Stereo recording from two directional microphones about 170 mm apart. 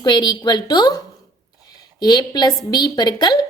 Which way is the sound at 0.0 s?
25° left (ahead or behind).